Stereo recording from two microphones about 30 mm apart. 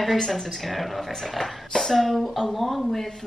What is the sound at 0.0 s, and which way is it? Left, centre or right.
Speech, centre.